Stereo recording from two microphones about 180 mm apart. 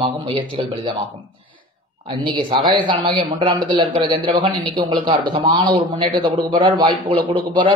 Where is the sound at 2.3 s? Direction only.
25° right (ahead or behind).